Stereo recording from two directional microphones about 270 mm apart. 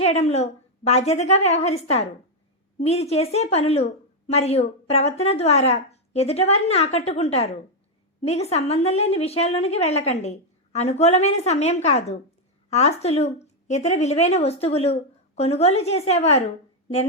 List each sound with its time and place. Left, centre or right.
0.0 s a woman's voice: left